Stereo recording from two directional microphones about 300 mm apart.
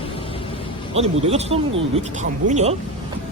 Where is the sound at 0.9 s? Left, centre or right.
Centre.